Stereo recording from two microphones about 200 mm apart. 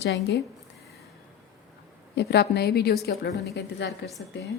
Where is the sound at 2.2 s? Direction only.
55° left (ahead or behind).